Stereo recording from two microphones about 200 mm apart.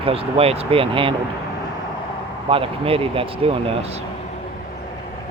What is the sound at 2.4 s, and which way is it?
Speech, 25° right (ahead or behind).